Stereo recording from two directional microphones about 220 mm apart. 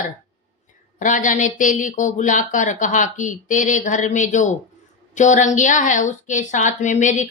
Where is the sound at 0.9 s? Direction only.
35° left (ahead or behind).